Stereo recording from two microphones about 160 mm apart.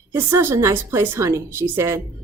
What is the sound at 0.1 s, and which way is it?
A woman's voice, 15° right (ahead or behind).